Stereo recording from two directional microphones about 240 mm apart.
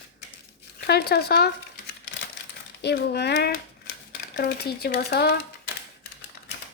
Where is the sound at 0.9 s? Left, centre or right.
Left.